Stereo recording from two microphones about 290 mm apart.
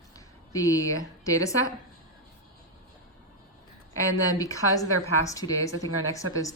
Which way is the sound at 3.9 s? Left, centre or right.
Centre.